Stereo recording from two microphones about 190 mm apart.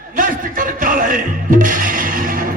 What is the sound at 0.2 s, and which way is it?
Music, 45° right (ahead or behind).